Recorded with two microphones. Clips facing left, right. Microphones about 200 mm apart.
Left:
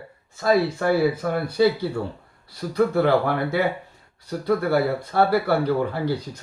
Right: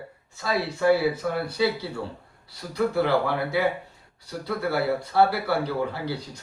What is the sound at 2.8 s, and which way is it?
Speech, 50° left (ahead or behind).